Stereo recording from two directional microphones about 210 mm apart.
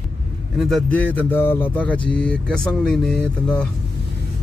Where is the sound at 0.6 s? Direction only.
Centre (ahead or behind).